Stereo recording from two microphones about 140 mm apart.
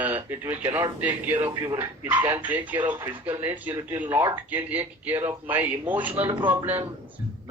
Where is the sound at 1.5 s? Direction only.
25° right (ahead or behind).